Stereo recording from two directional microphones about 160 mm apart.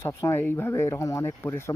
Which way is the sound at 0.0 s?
15° left (ahead or behind).